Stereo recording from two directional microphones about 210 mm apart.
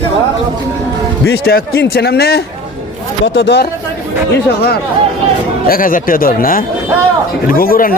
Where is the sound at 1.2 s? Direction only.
50° left (ahead or behind).